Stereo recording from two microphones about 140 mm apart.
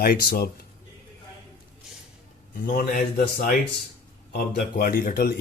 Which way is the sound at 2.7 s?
90° left.